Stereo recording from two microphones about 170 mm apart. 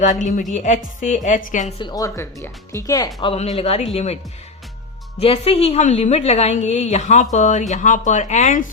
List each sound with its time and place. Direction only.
0.0 s a woman's voice: 50° left (ahead or behind)
1.8 s speech: 20° left (ahead or behind)
3.2 s a woman's voice: 35° left (ahead or behind)
5.2 s a woman's voice: 35° left (ahead or behind)